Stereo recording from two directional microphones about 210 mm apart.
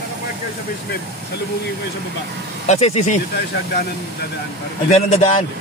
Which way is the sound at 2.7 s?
30° left (ahead or behind).